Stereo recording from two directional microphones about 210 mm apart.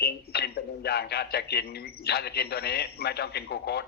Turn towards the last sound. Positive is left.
turn(degrees=50)  # may be behind; listen again after turning